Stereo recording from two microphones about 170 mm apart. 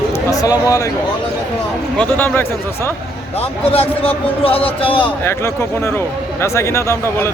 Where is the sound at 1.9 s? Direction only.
10° left (ahead or behind).